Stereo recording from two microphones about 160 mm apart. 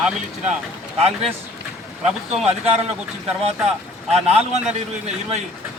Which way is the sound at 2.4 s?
40° right (ahead or behind).